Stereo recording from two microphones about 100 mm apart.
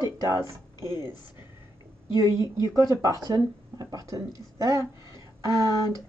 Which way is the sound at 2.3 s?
35° right (ahead or behind).